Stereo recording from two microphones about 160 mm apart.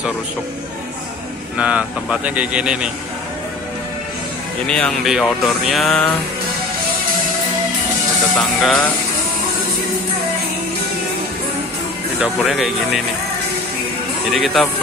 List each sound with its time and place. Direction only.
1.6 s speech: 10° right (ahead or behind)
4.6 s speech: 5° left (ahead or behind)
8.4 s speech: 5° left (ahead or behind)
12.2 s speech: centre (ahead or behind)
14.3 s speech: centre (ahead or behind)